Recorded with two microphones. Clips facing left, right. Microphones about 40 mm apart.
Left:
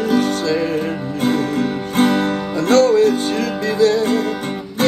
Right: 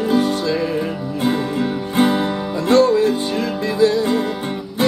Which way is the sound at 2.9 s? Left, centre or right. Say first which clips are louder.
Left 2 dB; left.